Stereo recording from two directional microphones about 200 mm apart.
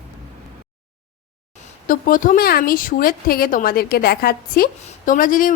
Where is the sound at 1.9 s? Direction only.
40° left (ahead or behind).